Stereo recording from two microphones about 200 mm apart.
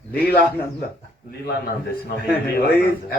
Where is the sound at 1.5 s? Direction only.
50° left (ahead or behind).